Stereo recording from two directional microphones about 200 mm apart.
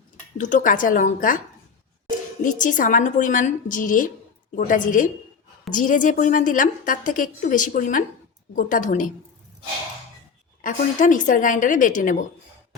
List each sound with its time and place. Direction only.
0.3 s a woman's voice: 40° left (ahead or behind)
2.4 s a woman's voice: 40° left (ahead or behind)
10.6 s a woman's voice: 40° left (ahead or behind)